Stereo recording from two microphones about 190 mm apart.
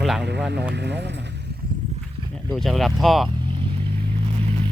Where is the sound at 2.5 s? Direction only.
Centre (ahead or behind).